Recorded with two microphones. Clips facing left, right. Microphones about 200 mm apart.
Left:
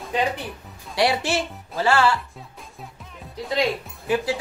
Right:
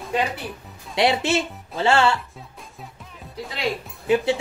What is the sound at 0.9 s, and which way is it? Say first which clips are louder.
Speech: right 2 dB; 20° right (ahead or behind).